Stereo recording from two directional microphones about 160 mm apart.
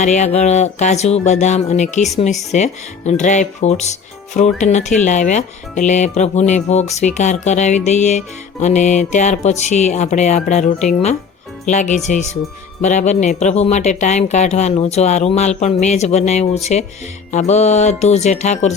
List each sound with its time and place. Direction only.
0.0 s speech: 45° left (ahead or behind)